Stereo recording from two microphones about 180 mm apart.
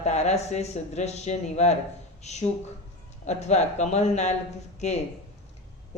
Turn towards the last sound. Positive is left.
turn(degrees=40)  # may be behind; listen again after turning